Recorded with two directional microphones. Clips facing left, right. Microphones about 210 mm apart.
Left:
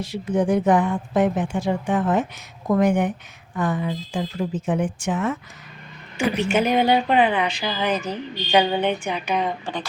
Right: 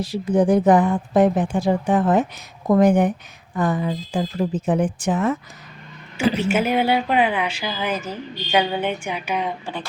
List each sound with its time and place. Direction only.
0.0 s speech: 35° right (ahead or behind)
6.4 s speech: 5° right (ahead or behind)